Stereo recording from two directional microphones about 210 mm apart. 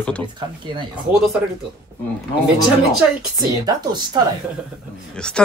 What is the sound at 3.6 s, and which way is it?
Speech, 20° right (ahead or behind).